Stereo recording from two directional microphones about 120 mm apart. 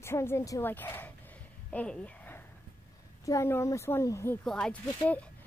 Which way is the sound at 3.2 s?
25° left (ahead or behind).